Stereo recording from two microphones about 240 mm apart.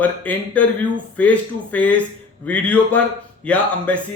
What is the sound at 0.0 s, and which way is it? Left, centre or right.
A man's voice, centre.